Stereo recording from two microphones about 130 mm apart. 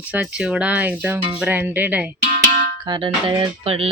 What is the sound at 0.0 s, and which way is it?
Speech, 10° right (ahead or behind).